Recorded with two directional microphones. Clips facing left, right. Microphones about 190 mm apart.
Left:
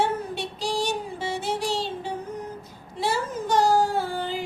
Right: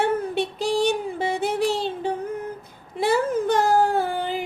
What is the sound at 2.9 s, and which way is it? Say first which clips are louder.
Whimper: right 6 dB; 55° right (ahead or behind).